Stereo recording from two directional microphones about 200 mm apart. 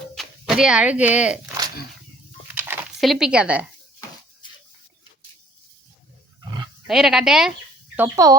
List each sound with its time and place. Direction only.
0.1 s a sound: centre (ahead or behind)
6.4 s roaring cats: 20° right (ahead or behind)
6.8 s speech: centre (ahead or behind)
7.9 s speech: 15° right (ahead or behind)